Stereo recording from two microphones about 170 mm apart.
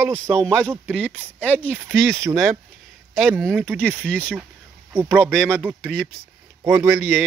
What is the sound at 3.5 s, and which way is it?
Speech, 10° right (ahead or behind).